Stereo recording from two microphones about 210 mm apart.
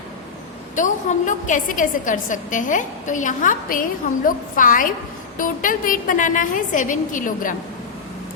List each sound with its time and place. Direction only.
0.8 s a woman's voice: 35° left (ahead or behind)